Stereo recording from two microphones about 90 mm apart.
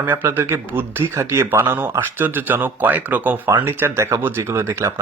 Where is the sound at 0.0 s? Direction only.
25° right (ahead or behind).